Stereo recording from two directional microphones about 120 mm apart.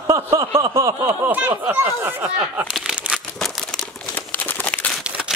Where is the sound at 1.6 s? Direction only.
15° right (ahead or behind).